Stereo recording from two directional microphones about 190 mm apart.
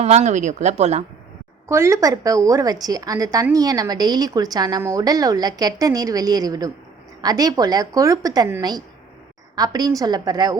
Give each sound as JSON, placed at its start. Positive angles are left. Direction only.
{"t": 0.0, "sound": "speech", "side_deg": -35}
{"t": 1.6, "sound": "a woman's voice", "side_deg": -15}